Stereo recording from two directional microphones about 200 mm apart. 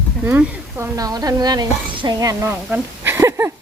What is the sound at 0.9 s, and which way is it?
Speech, 20° right (ahead or behind).